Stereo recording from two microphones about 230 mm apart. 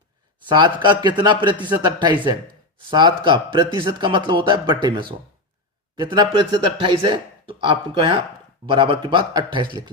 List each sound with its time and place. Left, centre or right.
0.4 s a man's voice: centre